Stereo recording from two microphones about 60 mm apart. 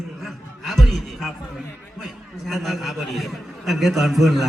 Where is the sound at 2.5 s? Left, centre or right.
Centre.